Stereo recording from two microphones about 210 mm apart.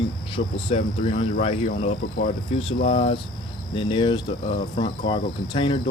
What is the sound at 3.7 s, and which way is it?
Speech, 25° left (ahead or behind).